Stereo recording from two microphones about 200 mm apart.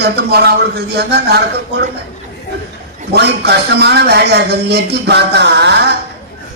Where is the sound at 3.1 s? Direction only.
55° right (ahead or behind).